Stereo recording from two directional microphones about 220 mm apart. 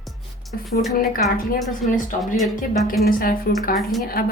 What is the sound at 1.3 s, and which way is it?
Speech, 40° left (ahead or behind).